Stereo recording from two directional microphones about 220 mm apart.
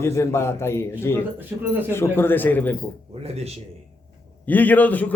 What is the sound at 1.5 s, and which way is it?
Speech, 10° right (ahead or behind).